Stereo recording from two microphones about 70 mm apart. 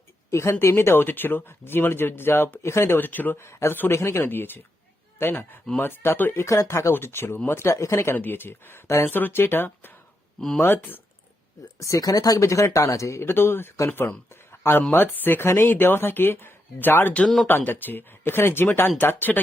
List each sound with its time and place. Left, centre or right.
0.3 s speech: left
3.0 s speech: left
3.3 s speech: left
6.4 s speech: left
8.1 s speech: left
11.8 s speech: left
14.5 s a sound: left
14.9 s speech: left